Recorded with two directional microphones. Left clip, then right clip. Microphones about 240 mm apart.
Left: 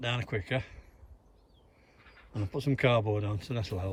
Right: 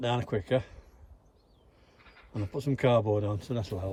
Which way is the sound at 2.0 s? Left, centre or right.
Right.